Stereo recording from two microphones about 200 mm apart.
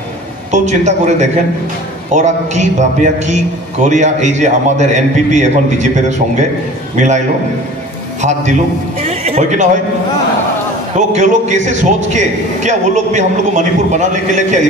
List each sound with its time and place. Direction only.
0.5 s a man's voice: 35° right (ahead or behind)
8.2 s a man's voice: 35° right (ahead or behind)
11.0 s a man's voice: 35° right (ahead or behind)